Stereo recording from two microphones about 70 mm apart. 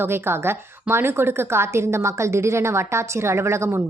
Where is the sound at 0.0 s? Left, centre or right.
Right.